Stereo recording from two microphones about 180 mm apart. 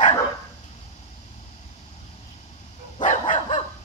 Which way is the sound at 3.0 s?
45° left (ahead or behind).